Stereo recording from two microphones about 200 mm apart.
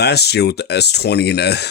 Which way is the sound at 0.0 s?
55° left (ahead or behind).